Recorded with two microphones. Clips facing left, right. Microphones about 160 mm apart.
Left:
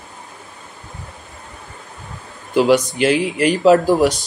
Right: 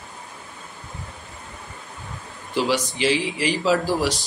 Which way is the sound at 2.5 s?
55° left (ahead or behind).